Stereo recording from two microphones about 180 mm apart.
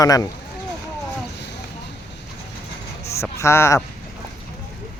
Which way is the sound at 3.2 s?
15° left (ahead or behind).